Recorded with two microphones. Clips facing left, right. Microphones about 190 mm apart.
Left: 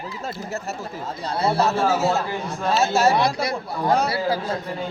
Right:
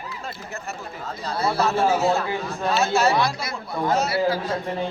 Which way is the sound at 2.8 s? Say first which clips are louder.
Left 2 dB; 40° left (ahead or behind).